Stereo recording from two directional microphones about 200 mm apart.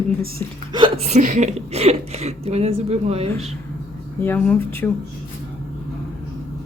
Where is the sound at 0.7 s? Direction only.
25° right (ahead or behind).